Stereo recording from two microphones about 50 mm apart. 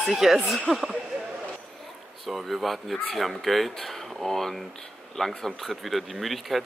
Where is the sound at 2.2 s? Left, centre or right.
Centre.